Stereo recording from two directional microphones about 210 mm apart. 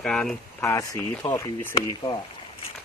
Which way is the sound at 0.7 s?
15° left (ahead or behind).